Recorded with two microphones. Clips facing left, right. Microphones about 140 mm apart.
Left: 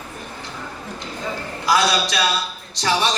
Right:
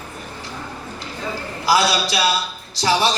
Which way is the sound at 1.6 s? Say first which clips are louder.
Right 1 dB; 30° right (ahead or behind).